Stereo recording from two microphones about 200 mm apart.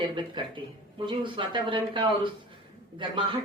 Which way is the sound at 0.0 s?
25° right (ahead or behind).